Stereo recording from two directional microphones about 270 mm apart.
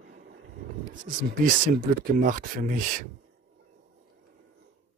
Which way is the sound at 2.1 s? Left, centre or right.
Right.